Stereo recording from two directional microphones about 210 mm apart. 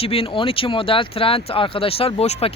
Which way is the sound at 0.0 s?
25° left (ahead or behind).